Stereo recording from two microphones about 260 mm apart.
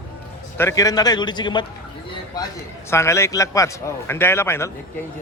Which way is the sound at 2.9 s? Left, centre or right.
Centre.